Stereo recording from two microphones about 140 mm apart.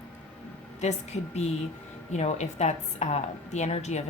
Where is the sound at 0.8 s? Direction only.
55° left (ahead or behind).